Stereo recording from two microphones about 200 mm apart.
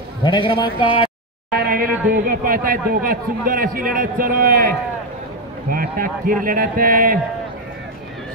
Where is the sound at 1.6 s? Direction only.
45° right (ahead or behind).